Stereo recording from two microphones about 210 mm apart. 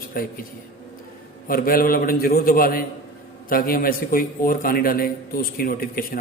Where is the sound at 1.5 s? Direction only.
45° left (ahead or behind).